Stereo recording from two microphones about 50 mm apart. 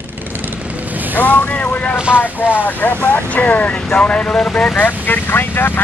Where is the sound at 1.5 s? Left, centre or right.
Left.